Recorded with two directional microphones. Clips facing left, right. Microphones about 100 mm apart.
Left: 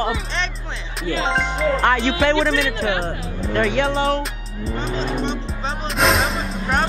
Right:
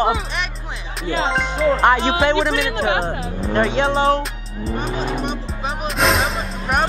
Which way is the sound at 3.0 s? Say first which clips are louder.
Right 3 dB; 35° right (ahead or behind).